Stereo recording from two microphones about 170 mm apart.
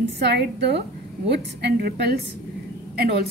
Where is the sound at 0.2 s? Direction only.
80° right.